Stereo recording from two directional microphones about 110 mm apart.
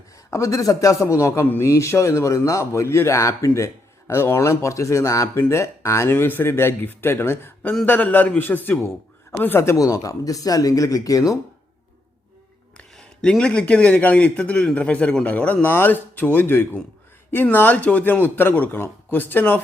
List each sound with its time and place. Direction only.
0.3 s a man's voice: 30° left (ahead or behind)
12.7 s a man's voice: 5° left (ahead or behind)